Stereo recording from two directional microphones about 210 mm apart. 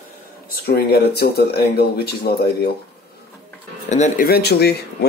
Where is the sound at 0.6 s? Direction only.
50° left (ahead or behind).